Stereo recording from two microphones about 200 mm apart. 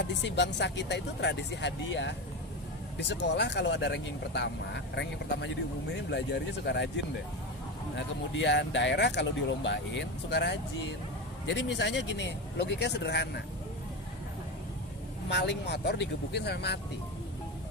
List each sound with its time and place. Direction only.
0.0 s speech: 60° left (ahead or behind)
15.3 s speech: 60° left (ahead or behind)